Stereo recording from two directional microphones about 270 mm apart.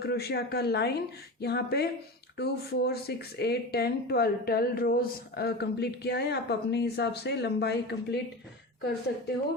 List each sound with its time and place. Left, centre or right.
0.0 s speech: left